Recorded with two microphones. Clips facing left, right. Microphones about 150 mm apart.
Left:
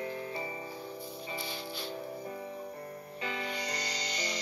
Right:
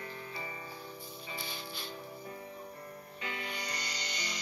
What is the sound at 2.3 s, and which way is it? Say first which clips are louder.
Music: left 5 dB; 40° left (ahead or behind).